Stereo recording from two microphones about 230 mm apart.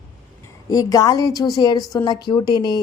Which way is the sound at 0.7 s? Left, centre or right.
Centre.